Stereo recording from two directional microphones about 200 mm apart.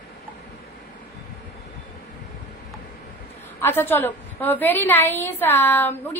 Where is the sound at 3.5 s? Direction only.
10° left (ahead or behind).